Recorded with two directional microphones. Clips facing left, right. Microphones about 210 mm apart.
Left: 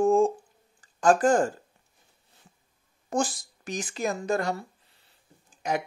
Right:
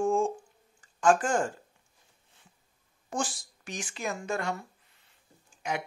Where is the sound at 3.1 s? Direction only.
40° left (ahead or behind).